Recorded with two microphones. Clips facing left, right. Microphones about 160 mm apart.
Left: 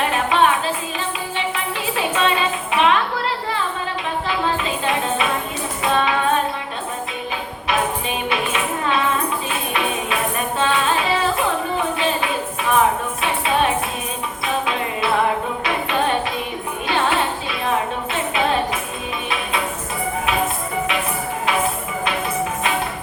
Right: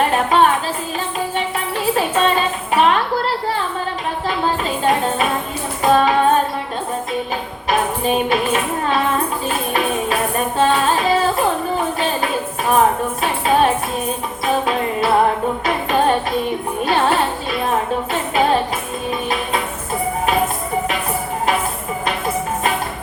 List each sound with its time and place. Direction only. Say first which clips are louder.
0.1 s music: right 3 dB; 40° right (ahead or behind)
1.5 s music: right 5 dB; 45° right (ahead or behind)
4.3 s a sound: right 3 dB; 45° right (ahead or behind)
5.8 s music: right 6 dB; 40° right (ahead or behind)
7.7 s music: right 4 dB; 40° right (ahead or behind)